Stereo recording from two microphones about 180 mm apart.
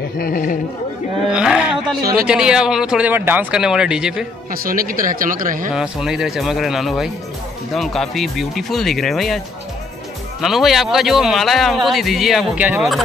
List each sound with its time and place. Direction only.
0.2 s speech: 50° left (ahead or behind)
1.2 s a sound: 5° right (ahead or behind)
2.1 s a man's voice: 5° right (ahead or behind)
4.5 s speech: 50° right (ahead or behind)
5.8 s a man's voice: centre (ahead or behind)
10.4 s a man's voice: centre (ahead or behind)